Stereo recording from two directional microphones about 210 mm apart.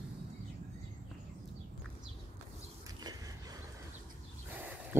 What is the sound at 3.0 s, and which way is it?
Skateboard, 20° right (ahead or behind).